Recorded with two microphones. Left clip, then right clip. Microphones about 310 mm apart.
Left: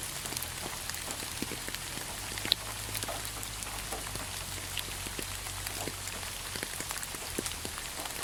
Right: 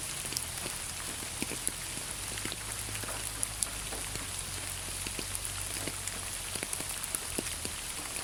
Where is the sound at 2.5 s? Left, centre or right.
Left.